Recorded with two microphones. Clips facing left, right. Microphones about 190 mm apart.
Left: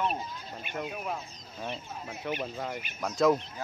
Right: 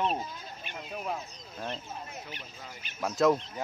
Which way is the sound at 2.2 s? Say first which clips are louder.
Left 12 dB; 65° left (ahead or behind).